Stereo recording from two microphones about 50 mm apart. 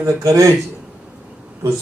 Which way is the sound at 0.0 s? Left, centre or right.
Right.